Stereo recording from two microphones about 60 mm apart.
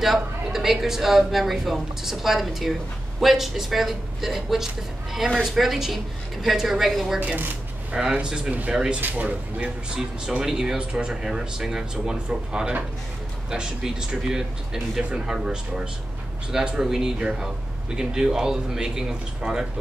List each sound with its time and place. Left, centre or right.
0.0 s a woman's voice: centre
7.9 s speech: centre
9.0 s speech: right
9.9 s speech: centre